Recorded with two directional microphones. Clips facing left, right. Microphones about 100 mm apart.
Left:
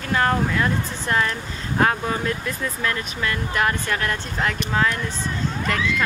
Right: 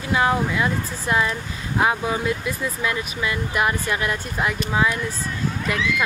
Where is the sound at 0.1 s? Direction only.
10° right (ahead or behind).